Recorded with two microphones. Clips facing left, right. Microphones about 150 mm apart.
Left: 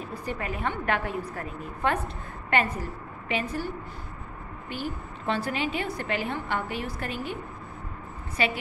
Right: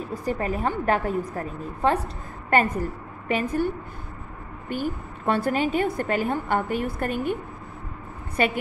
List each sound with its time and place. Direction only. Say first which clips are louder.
0.2 s a woman's voice: right 6 dB; 40° right (ahead or behind)
2.5 s a woman's voice: right 5 dB; 45° right (ahead or behind)
8.4 s a woman's voice: right 4 dB; 50° right (ahead or behind)